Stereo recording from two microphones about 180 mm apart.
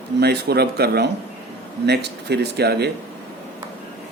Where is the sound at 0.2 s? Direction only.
65° right (ahead or behind).